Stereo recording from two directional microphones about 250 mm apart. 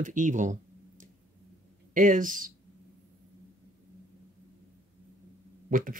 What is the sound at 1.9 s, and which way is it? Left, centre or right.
Speech, right.